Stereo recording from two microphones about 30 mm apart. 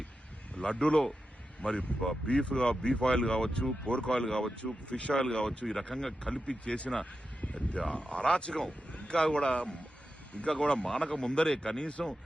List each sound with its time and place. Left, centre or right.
0.5 s speech: left
1.6 s speech: left
4.3 s speech: centre
4.6 s speech: left
5.1 s speech: left
6.2 s speech: left
8.9 s a sound: left
9.1 s speech: left